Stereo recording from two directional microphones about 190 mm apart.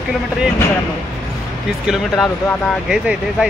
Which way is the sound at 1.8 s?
Centre (ahead or behind).